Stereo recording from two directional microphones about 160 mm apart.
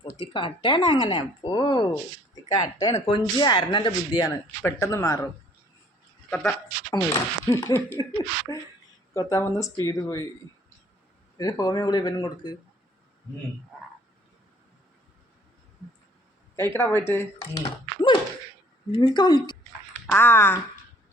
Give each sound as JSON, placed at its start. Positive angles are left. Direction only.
{"t": 0.0, "sound": "speech", "side_deg": 30}
{"t": 4.2, "sound": "speech", "side_deg": 20}
{"t": 6.9, "sound": "speech", "side_deg": 20}
{"t": 9.1, "sound": "speech", "side_deg": 20}
{"t": 11.3, "sound": "speech", "side_deg": 25}
{"t": 16.6, "sound": "speech", "side_deg": 15}
{"t": 17.6, "sound": "speech", "side_deg": 30}
{"t": 20.1, "sound": "speech", "side_deg": 15}